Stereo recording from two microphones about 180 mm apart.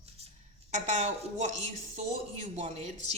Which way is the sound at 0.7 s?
40° right (ahead or behind).